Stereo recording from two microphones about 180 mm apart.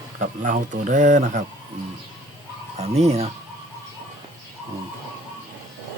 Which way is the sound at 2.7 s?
35° right (ahead or behind).